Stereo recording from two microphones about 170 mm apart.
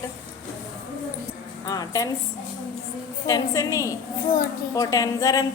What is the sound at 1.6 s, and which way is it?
Speech, 20° left (ahead or behind).